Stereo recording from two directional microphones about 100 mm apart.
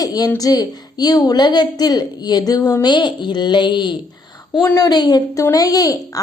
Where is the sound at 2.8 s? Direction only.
50° left (ahead or behind).